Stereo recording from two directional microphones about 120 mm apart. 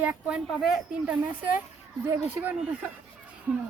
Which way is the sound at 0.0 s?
10° right (ahead or behind).